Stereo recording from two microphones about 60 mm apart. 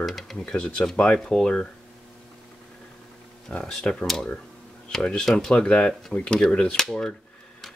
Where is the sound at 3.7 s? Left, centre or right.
Centre.